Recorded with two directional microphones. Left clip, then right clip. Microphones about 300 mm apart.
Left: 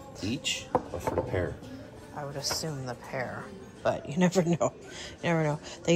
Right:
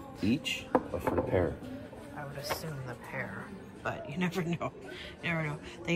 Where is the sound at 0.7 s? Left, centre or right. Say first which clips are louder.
Right 2 dB; centre.